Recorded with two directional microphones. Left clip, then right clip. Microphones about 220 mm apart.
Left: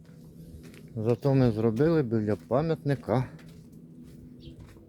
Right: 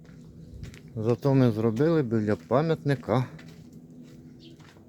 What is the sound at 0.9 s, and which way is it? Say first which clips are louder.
Speech: right 1 dB; 5° left (ahead or behind).